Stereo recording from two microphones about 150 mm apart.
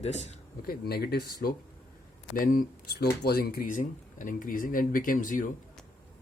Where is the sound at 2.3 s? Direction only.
70° left (ahead or behind).